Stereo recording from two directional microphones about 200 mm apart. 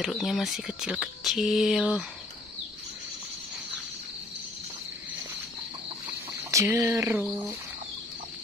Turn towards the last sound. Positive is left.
turn(degrees=-15)  # may be behind; listen again after turning